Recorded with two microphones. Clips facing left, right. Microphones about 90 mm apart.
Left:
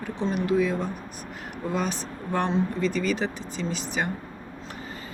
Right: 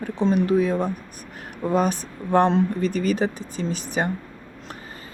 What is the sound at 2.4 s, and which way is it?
Speech, 55° right (ahead or behind).